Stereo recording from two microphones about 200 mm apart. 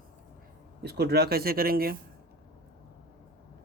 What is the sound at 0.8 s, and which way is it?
Speech, 55° right (ahead or behind).